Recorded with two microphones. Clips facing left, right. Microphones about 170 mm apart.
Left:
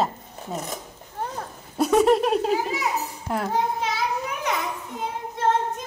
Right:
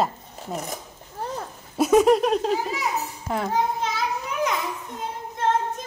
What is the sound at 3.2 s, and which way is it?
Speech, centre (ahead or behind).